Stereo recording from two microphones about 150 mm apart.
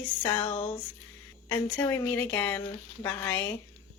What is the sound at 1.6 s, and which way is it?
A woman's voice, 15° left (ahead or behind).